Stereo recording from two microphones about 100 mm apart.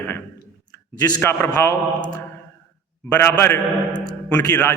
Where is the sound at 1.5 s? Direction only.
45° left (ahead or behind).